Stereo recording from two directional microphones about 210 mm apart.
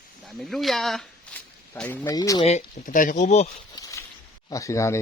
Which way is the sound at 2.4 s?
30° left (ahead or behind).